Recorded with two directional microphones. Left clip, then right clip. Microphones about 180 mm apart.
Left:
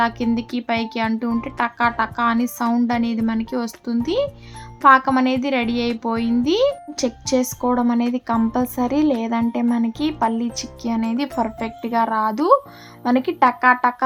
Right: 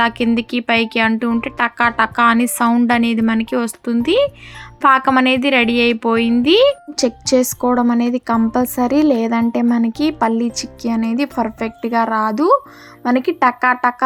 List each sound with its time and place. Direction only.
0.0 s speech: 20° right (ahead or behind)